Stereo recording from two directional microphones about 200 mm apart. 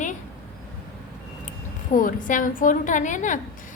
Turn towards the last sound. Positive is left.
turn(degrees=40)  # may be behind; listen again after turning